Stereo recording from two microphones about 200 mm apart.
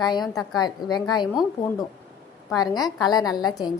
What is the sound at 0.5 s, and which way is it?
Speech, 20° left (ahead or behind).